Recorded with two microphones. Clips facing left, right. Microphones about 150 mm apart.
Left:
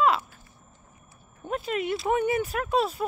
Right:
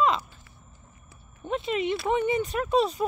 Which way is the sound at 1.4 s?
5° left (ahead or behind).